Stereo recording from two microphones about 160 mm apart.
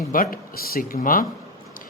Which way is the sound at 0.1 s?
60° left (ahead or behind).